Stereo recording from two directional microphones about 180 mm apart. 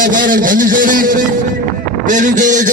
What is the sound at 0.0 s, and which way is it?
A man's voice, 50° right (ahead or behind).